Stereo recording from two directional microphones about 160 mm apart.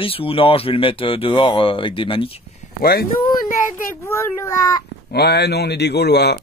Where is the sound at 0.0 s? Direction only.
35° left (ahead or behind).